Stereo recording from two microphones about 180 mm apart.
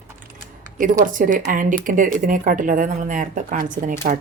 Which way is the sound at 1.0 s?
50° right (ahead or behind).